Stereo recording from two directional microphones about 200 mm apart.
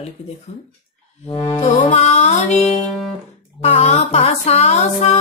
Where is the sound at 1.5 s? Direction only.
35° left (ahead or behind).